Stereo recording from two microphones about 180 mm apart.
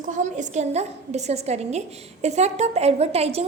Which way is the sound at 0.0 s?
45° right (ahead or behind).